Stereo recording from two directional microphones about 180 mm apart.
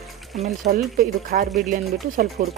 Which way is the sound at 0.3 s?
40° right (ahead or behind).